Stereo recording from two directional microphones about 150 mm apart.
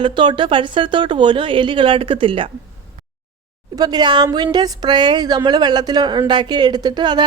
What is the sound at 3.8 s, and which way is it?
Speech, 25° right (ahead or behind).